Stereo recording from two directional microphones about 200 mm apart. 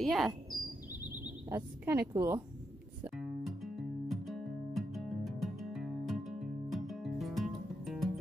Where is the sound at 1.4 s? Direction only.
10° right (ahead or behind).